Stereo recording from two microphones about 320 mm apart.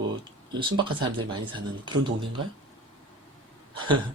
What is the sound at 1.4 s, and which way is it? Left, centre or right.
Speech, centre.